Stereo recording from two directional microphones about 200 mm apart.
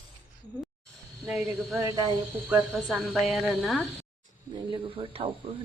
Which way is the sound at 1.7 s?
15° right (ahead or behind).